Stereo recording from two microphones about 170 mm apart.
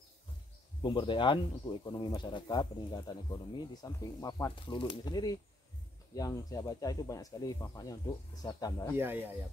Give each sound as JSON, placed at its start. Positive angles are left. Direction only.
{"t": 0.8, "sound": "speech", "side_deg": 30}
{"t": 8.9, "sound": "speech", "side_deg": -10}